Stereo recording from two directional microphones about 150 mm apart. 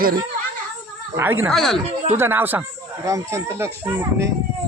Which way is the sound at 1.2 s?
15° right (ahead or behind).